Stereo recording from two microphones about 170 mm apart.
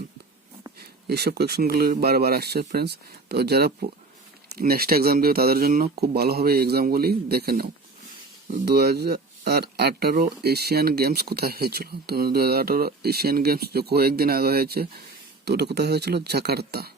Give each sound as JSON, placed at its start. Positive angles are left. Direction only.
{"t": 1.0, "sound": "speech", "side_deg": -70}